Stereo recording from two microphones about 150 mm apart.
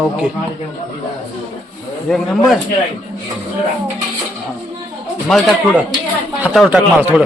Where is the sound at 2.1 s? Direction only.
Centre (ahead or behind).